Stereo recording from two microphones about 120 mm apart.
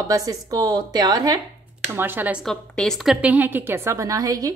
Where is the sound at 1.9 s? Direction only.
15° right (ahead or behind).